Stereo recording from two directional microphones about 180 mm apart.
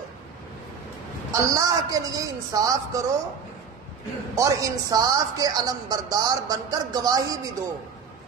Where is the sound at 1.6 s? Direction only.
20° right (ahead or behind).